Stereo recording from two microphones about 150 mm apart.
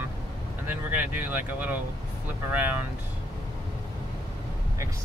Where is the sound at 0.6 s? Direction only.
15° right (ahead or behind).